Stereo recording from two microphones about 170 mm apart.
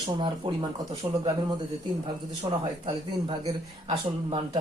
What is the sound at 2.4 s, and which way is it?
Speech, 25° right (ahead or behind).